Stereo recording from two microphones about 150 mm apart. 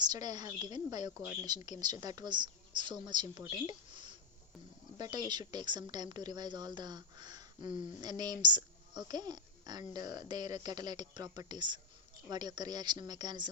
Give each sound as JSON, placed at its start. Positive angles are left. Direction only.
{"t": 0.0, "sound": "speech", "side_deg": -25}
{"t": 4.9, "sound": "speech", "side_deg": -25}